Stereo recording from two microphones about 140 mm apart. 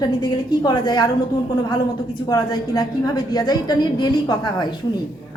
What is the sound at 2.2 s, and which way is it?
A man's voice, 25° left (ahead or behind).